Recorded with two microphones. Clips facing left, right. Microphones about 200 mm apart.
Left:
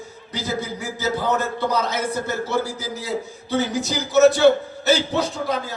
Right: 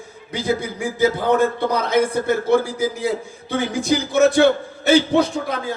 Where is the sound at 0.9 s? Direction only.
55° right (ahead or behind).